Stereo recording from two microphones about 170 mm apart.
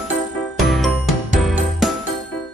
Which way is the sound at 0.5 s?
Centre (ahead or behind).